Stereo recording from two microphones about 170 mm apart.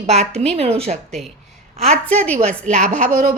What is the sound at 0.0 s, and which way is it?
Speech, 40° right (ahead or behind).